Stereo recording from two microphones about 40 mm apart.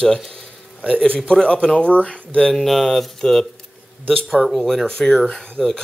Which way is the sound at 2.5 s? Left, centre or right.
Centre.